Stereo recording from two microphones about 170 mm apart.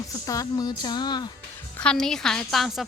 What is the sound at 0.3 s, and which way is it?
Speech, 20° left (ahead or behind).